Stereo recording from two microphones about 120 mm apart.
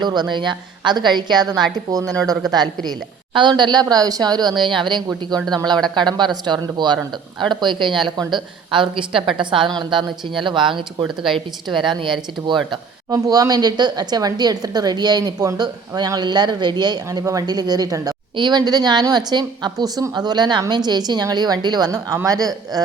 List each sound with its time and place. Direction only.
0.0 s a woman's voice: 40° right (ahead or behind)
2.0 s speech: centre (ahead or behind)
2.5 s a woman's voice: 35° right (ahead or behind)
12.7 s a woman's voice: 30° right (ahead or behind)